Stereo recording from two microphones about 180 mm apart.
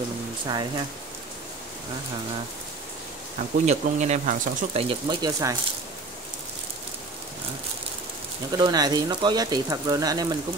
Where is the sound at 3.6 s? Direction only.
40° right (ahead or behind).